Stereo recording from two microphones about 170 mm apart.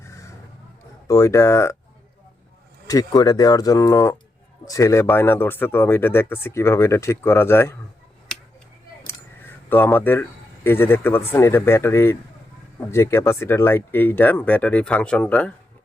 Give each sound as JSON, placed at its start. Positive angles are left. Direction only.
{"t": 0.0, "sound": "a sound", "side_deg": 15}
{"t": 1.0, "sound": "speech", "side_deg": 20}
{"t": 2.8, "sound": "speech", "side_deg": 20}
{"t": 9.6, "sound": "speech", "side_deg": 10}